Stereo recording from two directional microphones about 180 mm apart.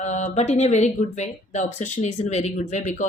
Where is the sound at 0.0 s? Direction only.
40° left (ahead or behind).